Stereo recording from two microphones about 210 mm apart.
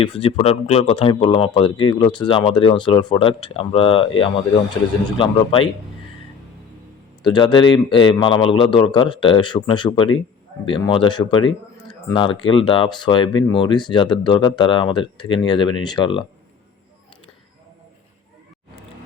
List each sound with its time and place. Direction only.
0.0 s speech: 25° left (ahead or behind)
7.2 s speech: 20° left (ahead or behind)